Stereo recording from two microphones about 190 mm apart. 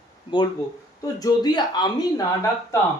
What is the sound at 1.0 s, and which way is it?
Speech, 20° left (ahead or behind).